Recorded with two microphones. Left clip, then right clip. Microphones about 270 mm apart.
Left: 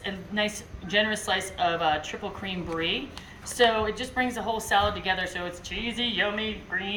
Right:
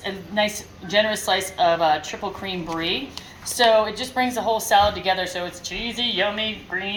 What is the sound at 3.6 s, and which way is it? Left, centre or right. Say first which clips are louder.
A woman's voice: right 6 dB; right.